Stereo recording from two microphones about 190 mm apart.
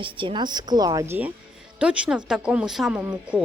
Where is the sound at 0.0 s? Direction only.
25° right (ahead or behind).